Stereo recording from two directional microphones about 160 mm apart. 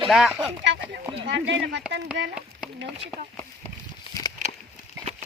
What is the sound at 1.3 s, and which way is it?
Speech, 90° right.